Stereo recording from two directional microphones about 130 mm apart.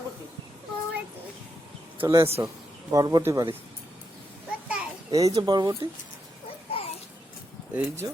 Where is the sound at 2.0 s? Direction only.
25° right (ahead or behind).